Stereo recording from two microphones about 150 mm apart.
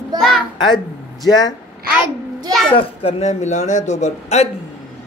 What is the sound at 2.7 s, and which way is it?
Speech, 40° left (ahead or behind).